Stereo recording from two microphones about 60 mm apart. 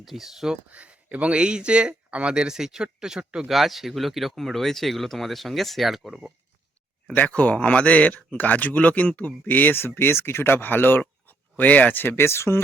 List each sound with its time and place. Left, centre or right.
0.0 s speech: centre
0.7 s speech: right
3.5 s speech: centre
7.1 s a man's voice: left